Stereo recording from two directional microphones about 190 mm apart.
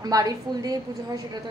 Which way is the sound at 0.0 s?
20° right (ahead or behind).